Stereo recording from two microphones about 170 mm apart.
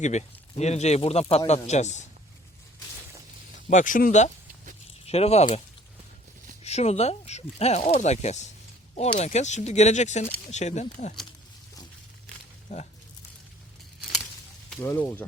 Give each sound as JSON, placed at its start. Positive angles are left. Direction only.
{"t": 0.0, "sound": "speech", "side_deg": 45}
{"t": 3.7, "sound": "speech", "side_deg": 50}
{"t": 5.0, "sound": "speech", "side_deg": 40}
{"t": 12.6, "sound": "speech", "side_deg": 45}
{"t": 14.8, "sound": "speech", "side_deg": 15}